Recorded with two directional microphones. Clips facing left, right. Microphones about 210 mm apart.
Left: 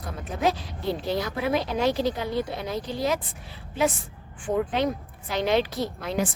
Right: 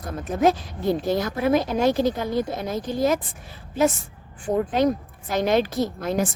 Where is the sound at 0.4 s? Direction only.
45° right (ahead or behind).